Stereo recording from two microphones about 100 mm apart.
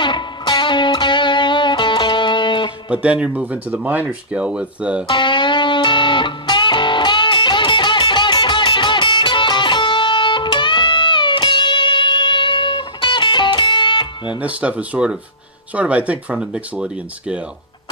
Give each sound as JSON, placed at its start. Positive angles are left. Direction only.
{"t": 0.0, "sound": "music", "side_deg": 50}
{"t": 2.9, "sound": "speech", "side_deg": -10}
{"t": 5.0, "sound": "music", "side_deg": 55}
{"t": 14.4, "sound": "speech", "side_deg": -15}